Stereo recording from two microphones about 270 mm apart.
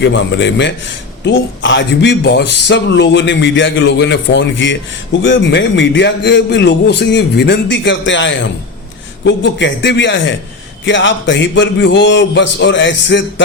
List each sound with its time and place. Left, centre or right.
0.0 s speech: left